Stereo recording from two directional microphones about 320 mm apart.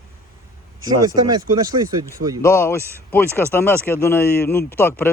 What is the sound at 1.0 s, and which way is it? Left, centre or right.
Speech, centre.